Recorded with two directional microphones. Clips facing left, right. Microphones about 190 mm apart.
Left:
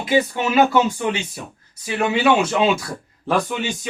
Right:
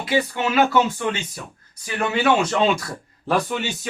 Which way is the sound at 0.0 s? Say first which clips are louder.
Left 3 dB; 20° left (ahead or behind).